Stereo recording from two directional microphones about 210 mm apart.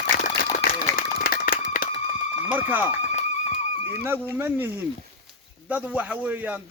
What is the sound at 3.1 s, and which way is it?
Music, 30° left (ahead or behind).